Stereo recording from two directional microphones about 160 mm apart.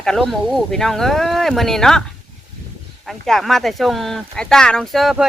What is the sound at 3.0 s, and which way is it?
Speech, centre (ahead or behind).